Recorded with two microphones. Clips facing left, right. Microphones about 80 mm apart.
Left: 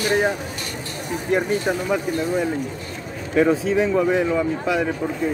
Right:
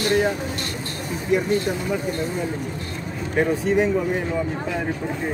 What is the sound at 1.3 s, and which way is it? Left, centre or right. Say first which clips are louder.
Speech: even; left.